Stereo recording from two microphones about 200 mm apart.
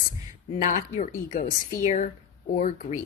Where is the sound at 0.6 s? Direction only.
40° left (ahead or behind).